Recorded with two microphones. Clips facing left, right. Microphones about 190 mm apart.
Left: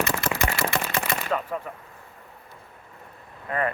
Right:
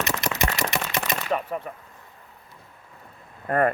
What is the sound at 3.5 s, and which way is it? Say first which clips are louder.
Speech: right 5 dB; 50° right (ahead or behind).